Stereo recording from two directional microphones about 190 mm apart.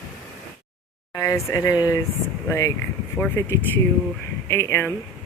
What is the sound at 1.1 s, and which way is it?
Speech, 15° left (ahead or behind).